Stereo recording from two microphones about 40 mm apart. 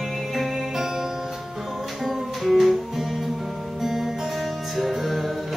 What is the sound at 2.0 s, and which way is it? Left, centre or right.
Music, centre.